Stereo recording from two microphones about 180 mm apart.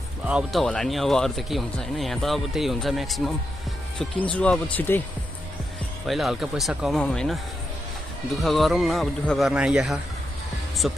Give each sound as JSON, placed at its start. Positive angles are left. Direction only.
{"t": 0.2, "sound": "speech", "side_deg": -5}
{"t": 6.0, "sound": "speech", "side_deg": 0}
{"t": 8.4, "sound": "speech", "side_deg": 0}